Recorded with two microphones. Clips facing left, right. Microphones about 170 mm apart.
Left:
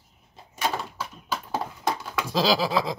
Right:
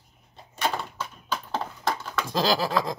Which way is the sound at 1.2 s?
10° left (ahead or behind).